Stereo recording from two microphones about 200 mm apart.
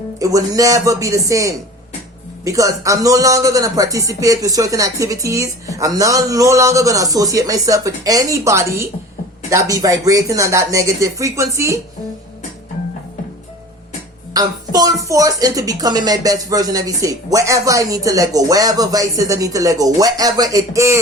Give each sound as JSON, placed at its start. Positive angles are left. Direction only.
{"t": 0.2, "sound": "speech", "side_deg": -15}
{"t": 14.3, "sound": "speech", "side_deg": -20}